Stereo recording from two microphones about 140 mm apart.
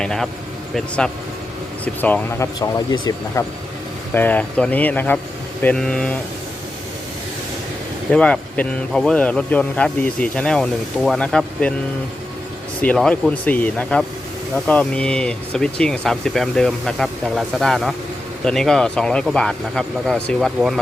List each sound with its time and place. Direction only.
0.0 s speech: 5° left (ahead or behind)
1.8 s speech: 10° left (ahead or behind)
2.6 s speech: 30° left (ahead or behind)
4.1 s speech: 10° left (ahead or behind)
8.1 s speech: 10° left (ahead or behind)
12.8 s speech: 10° left (ahead or behind)